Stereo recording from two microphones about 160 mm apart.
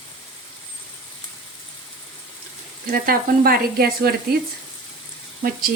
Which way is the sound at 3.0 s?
65° right (ahead or behind).